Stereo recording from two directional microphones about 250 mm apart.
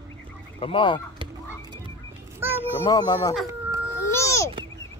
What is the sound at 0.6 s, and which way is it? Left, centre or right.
Speech, left.